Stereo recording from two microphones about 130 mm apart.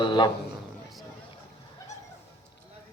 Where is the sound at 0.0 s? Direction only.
35° left (ahead or behind).